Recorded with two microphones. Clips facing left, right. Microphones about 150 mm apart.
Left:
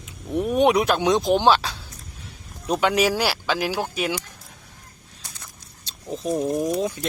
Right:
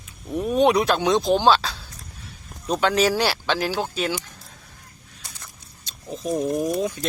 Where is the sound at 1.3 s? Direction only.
15° left (ahead or behind).